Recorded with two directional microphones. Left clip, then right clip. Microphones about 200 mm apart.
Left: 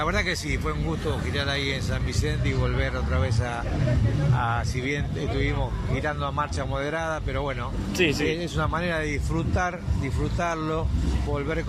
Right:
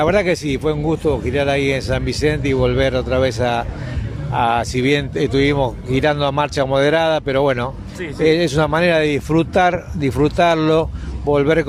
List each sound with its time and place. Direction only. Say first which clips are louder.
0.0 s speech: right 10 dB; 50° right (ahead or behind)